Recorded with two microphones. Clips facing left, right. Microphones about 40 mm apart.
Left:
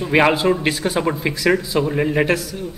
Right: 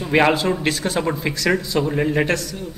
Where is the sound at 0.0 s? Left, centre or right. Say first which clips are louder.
Left 1 dB; centre.